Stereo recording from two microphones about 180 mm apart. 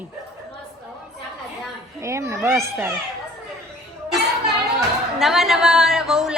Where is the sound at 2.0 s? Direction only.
15° right (ahead or behind).